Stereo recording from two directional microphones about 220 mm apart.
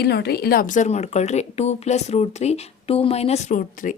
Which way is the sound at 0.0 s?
50° left (ahead or behind).